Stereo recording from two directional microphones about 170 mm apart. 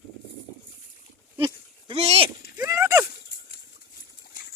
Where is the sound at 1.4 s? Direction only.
30° right (ahead or behind).